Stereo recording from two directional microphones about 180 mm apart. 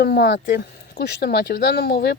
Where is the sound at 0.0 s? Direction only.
70° left (ahead or behind).